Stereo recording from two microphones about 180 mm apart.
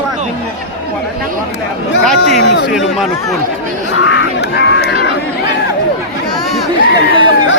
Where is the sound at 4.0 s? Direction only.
75° left (ahead or behind).